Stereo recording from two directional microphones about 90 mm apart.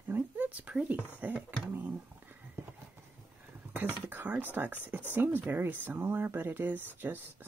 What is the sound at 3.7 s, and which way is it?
Speech, 20° right (ahead or behind).